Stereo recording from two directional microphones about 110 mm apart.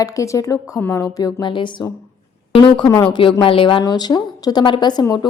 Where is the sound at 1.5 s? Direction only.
45° left (ahead or behind).